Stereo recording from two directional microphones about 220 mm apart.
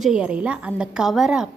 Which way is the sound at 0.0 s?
5° right (ahead or behind).